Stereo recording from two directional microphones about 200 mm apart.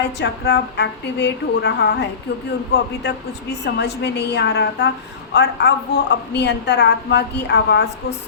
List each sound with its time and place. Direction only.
0.0 s a woman's voice: 55° left (ahead or behind)